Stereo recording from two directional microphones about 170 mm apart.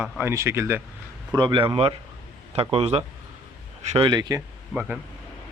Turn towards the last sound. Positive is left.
turn(degrees=-10)  # may be behind; listen again after turning